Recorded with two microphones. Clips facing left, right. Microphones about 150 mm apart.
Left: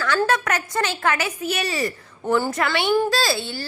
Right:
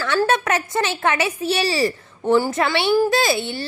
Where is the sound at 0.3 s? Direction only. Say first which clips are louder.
Right 2 dB; 25° right (ahead or behind).